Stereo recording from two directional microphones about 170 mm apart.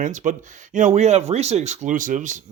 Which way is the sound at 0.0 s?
45° right (ahead or behind).